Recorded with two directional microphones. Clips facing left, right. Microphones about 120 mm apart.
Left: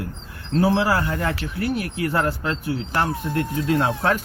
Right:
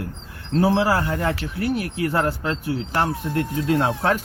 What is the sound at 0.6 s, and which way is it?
Speech, 35° right (ahead or behind).